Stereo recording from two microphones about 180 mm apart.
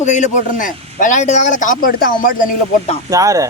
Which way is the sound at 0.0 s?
40° left (ahead or behind).